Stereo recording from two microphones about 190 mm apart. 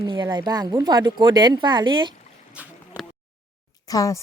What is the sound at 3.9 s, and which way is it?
Speech, 15° left (ahead or behind).